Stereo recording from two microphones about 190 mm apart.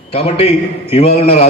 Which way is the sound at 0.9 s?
35° left (ahead or behind).